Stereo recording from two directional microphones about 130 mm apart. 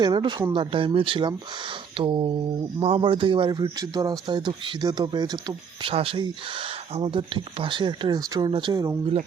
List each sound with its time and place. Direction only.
0.0 s speech: 35° right (ahead or behind)
5.9 s speech: 45° right (ahead or behind)
8.4 s speech: 40° right (ahead or behind)
8.7 s speech: 30° right (ahead or behind)